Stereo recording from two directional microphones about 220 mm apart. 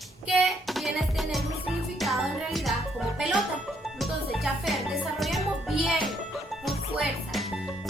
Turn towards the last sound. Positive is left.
turn(degrees=0)  # may be behind; listen again after turning